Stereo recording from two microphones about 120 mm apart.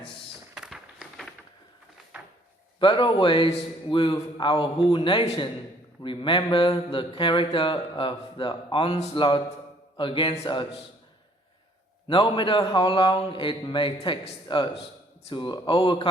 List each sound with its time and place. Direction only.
0.5 s a sound: 5° right (ahead or behind)
2.8 s a man's voice: 40° left (ahead or behind)
12.0 s speech: 45° left (ahead or behind)